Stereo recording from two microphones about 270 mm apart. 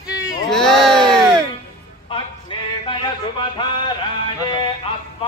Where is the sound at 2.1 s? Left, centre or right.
Centre.